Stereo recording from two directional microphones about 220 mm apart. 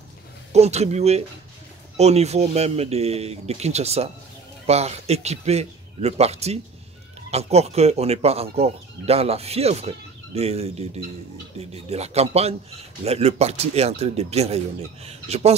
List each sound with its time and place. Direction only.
0.5 s speech: 30° right (ahead or behind)